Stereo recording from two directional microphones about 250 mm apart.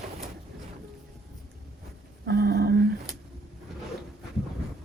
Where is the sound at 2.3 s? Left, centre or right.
Right.